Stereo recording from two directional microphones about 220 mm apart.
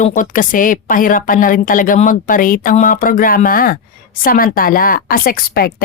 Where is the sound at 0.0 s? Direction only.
35° left (ahead or behind).